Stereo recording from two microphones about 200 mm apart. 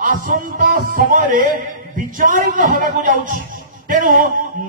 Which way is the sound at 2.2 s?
45° right (ahead or behind).